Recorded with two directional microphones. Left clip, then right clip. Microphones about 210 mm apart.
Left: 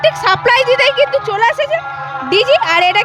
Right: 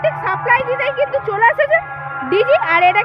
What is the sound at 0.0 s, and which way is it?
Speech, 40° left (ahead or behind).